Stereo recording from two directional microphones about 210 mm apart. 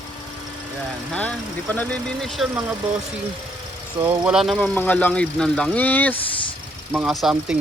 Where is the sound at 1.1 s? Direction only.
5° left (ahead or behind).